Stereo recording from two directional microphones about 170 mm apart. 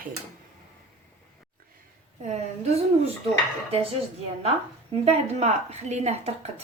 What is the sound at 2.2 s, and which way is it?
Speech, 40° right (ahead or behind).